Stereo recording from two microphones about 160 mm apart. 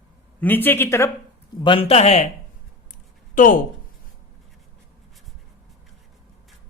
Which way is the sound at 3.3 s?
60° left (ahead or behind).